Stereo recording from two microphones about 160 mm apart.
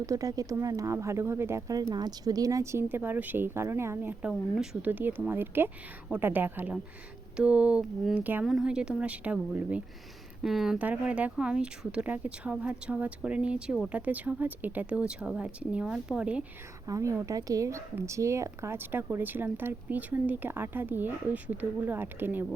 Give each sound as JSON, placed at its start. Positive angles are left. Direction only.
{"t": 0.0, "sound": "speech", "side_deg": -20}
{"t": 16.8, "sound": "speech", "side_deg": -20}